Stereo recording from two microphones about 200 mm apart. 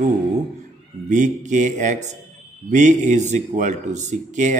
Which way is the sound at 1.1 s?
40° right (ahead or behind).